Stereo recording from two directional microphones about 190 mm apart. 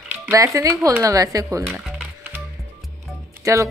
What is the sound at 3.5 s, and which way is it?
Speech, 15° right (ahead or behind).